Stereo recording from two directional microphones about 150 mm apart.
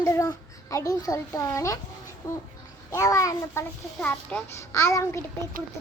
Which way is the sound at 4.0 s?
10° left (ahead or behind).